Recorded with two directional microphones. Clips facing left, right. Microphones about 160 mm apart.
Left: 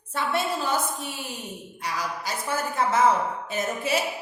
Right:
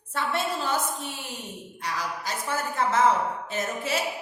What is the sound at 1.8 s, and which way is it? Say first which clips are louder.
A woman's voice: left 1 dB; 10° left (ahead or behind).